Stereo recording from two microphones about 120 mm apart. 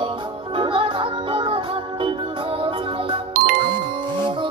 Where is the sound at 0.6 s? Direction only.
45° right (ahead or behind).